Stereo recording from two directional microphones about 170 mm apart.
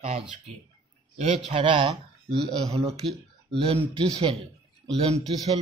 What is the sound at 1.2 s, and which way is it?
Speech, 40° right (ahead or behind).